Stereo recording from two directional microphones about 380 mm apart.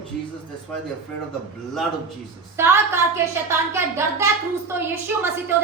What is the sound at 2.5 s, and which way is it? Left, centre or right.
A woman's voice, centre.